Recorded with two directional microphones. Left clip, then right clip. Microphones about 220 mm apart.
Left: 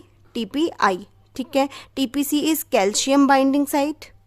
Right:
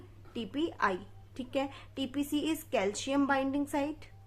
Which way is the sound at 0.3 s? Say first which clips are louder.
Left 12 dB; 55° left (ahead or behind).